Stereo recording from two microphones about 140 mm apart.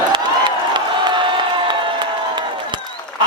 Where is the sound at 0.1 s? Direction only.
35° right (ahead or behind).